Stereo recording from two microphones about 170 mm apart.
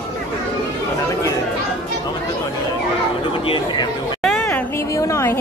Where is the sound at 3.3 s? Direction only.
30° left (ahead or behind).